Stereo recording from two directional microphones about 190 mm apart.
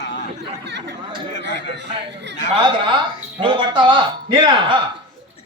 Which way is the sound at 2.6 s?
25° right (ahead or behind).